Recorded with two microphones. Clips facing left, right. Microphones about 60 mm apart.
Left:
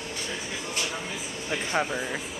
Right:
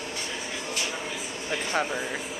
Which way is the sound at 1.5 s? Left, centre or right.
Centre.